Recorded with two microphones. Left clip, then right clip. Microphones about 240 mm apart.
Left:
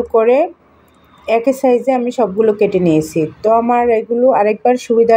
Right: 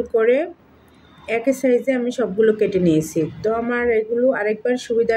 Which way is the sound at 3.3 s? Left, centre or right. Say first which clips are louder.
Left 12 dB; left.